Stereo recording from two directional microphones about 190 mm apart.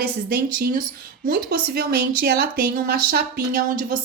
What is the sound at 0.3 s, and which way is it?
Speech, 50° right (ahead or behind).